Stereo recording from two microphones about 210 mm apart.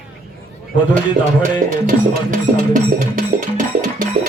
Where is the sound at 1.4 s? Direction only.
40° right (ahead or behind).